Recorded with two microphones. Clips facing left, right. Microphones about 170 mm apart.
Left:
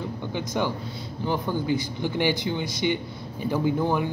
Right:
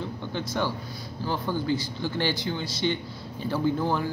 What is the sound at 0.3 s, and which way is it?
Speech, 15° left (ahead or behind).